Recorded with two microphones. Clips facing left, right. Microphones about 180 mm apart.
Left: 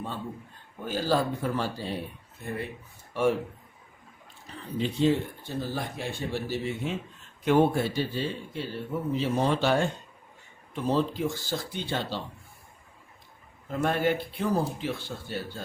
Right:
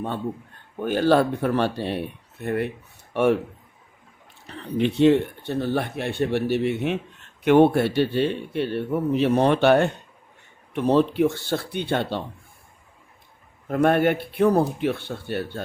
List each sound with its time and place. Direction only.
0.8 s speech: 65° right (ahead or behind)
4.4 s speech: 70° right (ahead or behind)
13.7 s speech: 60° right (ahead or behind)